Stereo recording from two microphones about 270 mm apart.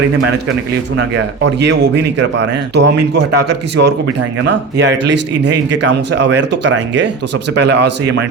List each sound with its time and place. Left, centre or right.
1.1 s speech: right